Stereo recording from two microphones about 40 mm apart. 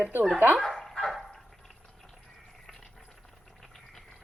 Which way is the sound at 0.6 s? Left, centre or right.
Centre.